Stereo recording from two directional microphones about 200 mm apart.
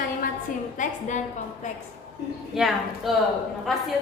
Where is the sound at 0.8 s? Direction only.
40° left (ahead or behind).